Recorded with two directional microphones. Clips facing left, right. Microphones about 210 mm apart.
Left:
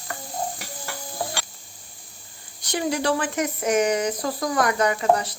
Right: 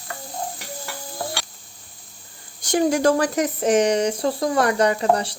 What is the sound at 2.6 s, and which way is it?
Speech, 45° right (ahead or behind).